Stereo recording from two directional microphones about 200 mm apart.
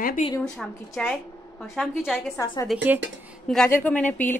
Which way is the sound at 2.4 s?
15° left (ahead or behind).